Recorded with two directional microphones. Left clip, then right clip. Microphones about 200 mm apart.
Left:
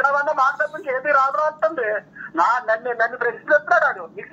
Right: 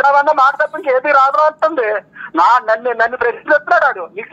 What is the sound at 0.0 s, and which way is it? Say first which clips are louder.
Speech: right 8 dB; 35° right (ahead or behind).